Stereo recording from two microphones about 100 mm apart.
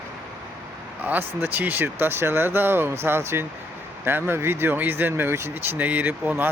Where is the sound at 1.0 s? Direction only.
15° right (ahead or behind).